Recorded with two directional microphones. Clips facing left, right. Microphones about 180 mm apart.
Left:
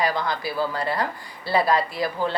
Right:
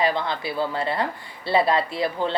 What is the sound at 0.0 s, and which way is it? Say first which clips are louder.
Speech: right 1 dB; 25° right (ahead or behind).